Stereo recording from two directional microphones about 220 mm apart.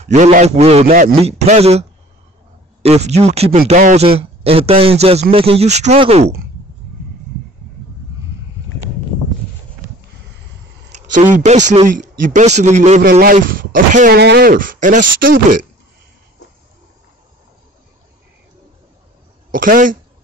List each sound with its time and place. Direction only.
0.0 s speech: 30° right (ahead or behind)
10.9 s a sound: 35° right (ahead or behind)
11.3 s speech: 35° right (ahead or behind)
19.5 s speech: 40° right (ahead or behind)